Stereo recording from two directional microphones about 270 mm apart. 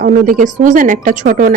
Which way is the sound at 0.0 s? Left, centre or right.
Right.